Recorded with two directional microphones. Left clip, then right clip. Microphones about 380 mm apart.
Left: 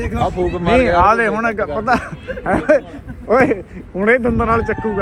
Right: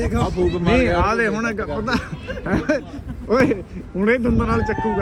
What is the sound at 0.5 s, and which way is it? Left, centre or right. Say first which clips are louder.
Speech: left 7 dB; centre.